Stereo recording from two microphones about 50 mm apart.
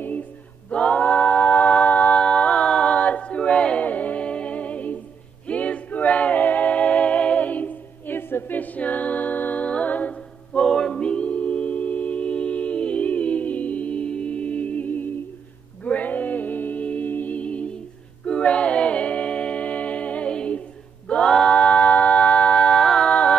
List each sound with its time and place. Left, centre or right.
0.7 s a capella: left
3.8 s music: left
8.5 s a capella: left
15.8 s music: left
21.1 s a capella: centre
21.5 s a sound: left
22.8 s music: centre